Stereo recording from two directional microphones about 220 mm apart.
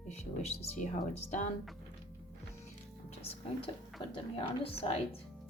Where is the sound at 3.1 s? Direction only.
25° left (ahead or behind).